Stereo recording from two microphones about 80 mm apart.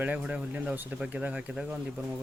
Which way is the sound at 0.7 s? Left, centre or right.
Right.